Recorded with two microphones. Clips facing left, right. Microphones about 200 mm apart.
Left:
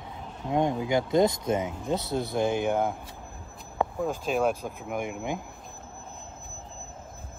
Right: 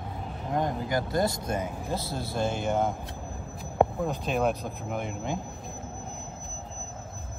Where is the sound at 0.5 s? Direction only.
20° left (ahead or behind).